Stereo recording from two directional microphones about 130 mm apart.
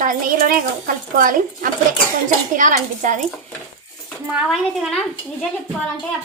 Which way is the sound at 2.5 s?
80° right.